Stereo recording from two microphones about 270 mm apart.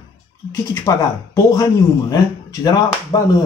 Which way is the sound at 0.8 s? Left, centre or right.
Centre.